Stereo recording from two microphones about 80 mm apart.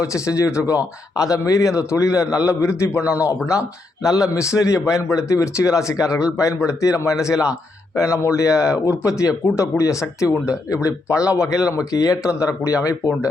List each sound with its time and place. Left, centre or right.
0.0 s a man's voice: left
7.3 s a man's voice: centre
7.9 s a man's voice: left